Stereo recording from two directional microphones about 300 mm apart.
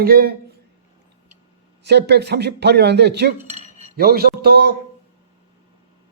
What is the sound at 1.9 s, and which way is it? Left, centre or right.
A man's voice, right.